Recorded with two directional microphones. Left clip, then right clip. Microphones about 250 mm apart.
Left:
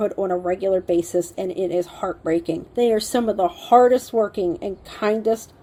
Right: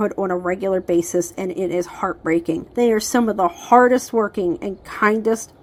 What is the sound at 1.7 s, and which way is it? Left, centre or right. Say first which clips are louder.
Speech: right 1 dB; centre.